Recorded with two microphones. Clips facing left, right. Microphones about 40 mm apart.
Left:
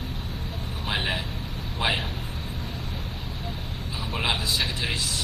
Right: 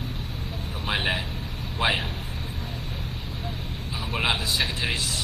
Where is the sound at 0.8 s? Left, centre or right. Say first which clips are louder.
Right 2 dB; centre.